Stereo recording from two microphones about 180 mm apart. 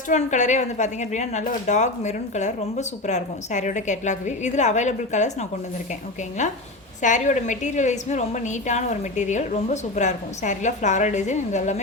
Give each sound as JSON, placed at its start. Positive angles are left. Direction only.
{"t": 0.1, "sound": "a woman's voice", "side_deg": 40}